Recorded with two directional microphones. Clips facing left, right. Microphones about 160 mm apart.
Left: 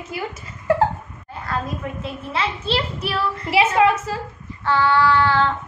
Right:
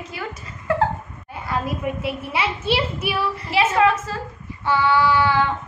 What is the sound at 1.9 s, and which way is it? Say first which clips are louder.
A woman's voice: right 4 dB; 15° right (ahead or behind).